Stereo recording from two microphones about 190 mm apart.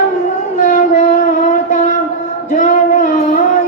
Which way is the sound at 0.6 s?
40° left (ahead or behind).